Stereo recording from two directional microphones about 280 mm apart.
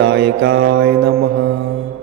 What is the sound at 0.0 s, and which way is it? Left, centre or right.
Mantra, right.